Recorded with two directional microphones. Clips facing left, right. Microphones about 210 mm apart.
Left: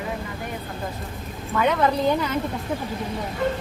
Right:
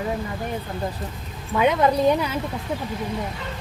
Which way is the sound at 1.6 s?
15° right (ahead or behind).